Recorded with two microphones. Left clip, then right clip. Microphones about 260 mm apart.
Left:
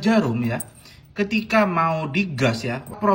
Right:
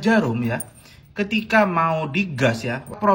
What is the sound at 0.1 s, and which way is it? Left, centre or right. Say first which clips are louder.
Speech: right 2 dB; centre.